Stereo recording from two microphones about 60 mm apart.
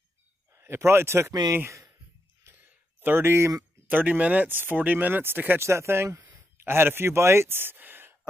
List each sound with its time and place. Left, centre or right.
0.6 s speech: right
3.0 s speech: right
3.3 s speech: right
3.8 s speech: right
5.6 s speech: right
6.1 s a sound: right